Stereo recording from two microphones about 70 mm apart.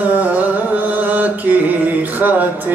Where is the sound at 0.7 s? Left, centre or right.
Right.